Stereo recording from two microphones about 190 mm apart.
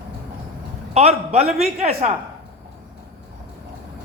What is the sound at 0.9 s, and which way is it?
Speech, 35° right (ahead or behind).